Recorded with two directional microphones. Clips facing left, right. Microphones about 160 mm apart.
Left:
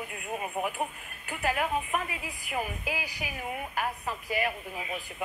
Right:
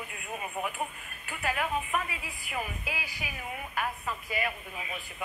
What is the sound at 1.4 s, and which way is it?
Speech, 40° left (ahead or behind).